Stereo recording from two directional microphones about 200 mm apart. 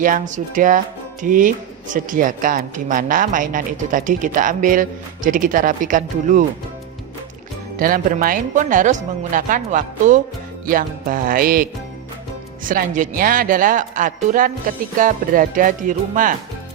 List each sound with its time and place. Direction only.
0.0 s speech: 40° right (ahead or behind)
7.8 s speech: 45° right (ahead or behind)